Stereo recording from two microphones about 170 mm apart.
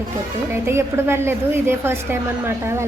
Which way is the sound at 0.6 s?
15° right (ahead or behind).